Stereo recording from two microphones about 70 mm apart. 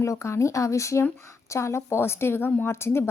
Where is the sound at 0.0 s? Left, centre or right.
Left.